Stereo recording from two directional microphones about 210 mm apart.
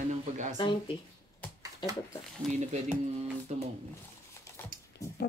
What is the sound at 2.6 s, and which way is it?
Speech, 35° right (ahead or behind).